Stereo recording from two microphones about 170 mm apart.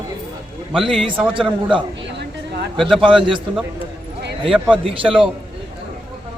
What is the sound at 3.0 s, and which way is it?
Speech, 30° right (ahead or behind).